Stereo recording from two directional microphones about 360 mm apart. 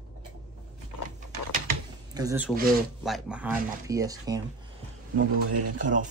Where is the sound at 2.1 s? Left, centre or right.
Centre.